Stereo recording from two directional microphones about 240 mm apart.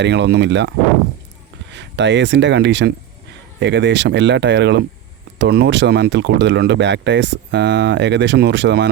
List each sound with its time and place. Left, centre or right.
0.0 s speech: right
1.7 s speech: right